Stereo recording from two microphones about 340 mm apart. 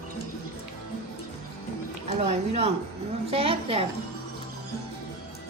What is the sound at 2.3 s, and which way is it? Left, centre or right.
A woman's voice, centre.